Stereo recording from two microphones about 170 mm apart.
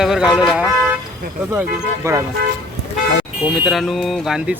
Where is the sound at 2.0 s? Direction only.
15° right (ahead or behind).